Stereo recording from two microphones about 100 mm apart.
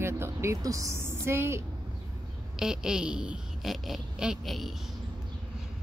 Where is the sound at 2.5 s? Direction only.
5° right (ahead or behind).